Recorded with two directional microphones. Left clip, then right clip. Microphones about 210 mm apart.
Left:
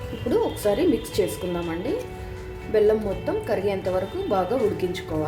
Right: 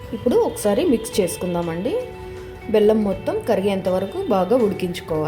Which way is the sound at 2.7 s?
35° right (ahead or behind).